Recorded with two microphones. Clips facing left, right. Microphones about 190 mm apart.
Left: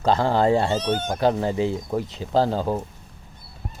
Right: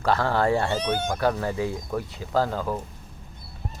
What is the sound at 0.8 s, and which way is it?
Speech, 10° right (ahead or behind).